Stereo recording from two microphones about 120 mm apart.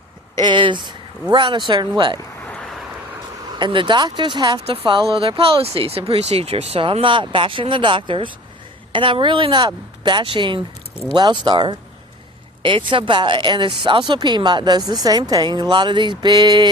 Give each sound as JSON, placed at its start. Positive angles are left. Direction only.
{"t": 0.3, "sound": "speech", "side_deg": -40}
{"t": 2.5, "sound": "vehicle", "side_deg": 5}
{"t": 3.6, "sound": "speech", "side_deg": -45}
{"t": 4.6, "sound": "speech", "side_deg": -50}